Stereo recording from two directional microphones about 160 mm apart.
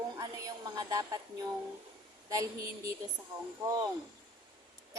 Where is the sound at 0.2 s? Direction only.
25° right (ahead or behind).